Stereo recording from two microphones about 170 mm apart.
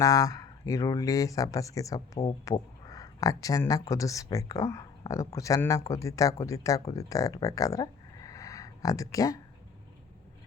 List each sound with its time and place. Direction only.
0.0 s speech: 20° left (ahead or behind)